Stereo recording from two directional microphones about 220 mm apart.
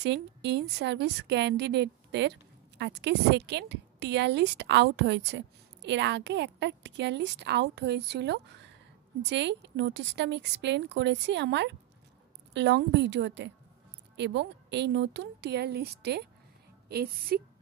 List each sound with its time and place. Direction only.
0.0 s a woman's voice: 50° right (ahead or behind)